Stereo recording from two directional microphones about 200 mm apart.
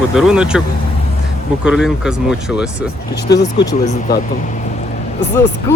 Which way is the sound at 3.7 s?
35° left (ahead or behind).